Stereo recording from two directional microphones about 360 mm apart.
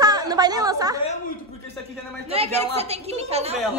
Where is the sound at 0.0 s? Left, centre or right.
Centre.